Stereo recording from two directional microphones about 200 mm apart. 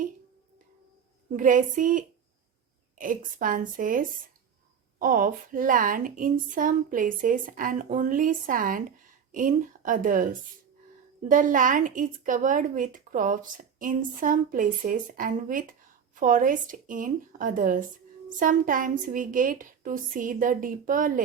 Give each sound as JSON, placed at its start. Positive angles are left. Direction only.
{"t": 1.3, "sound": "a woman's voice", "side_deg": -40}
{"t": 11.3, "sound": "a woman's voice", "side_deg": -40}